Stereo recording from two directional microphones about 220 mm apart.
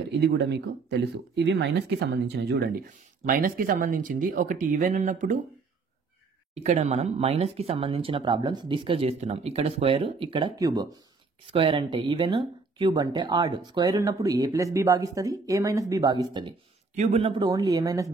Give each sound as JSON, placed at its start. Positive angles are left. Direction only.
{"t": 0.2, "sound": "speech", "side_deg": -50}
{"t": 6.5, "sound": "speech", "side_deg": -30}
{"t": 16.9, "sound": "speech", "side_deg": -30}